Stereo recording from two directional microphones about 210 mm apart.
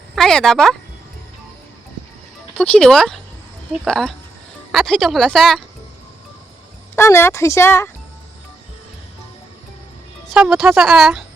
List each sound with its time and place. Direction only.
0.2 s speech: centre (ahead or behind)
2.6 s speech: 5° left (ahead or behind)
6.9 s a woman's voice: 10° left (ahead or behind)
10.2 s speech: centre (ahead or behind)